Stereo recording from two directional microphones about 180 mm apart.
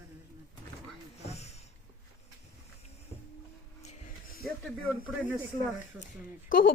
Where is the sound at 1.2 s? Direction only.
35° left (ahead or behind).